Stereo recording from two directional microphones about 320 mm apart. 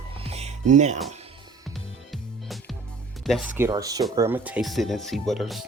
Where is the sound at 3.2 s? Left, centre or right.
Centre.